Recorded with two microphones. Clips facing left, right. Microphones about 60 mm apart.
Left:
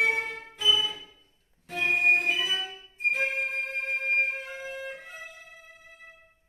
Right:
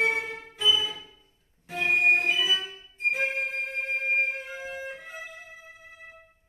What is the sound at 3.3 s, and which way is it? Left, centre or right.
Music, centre.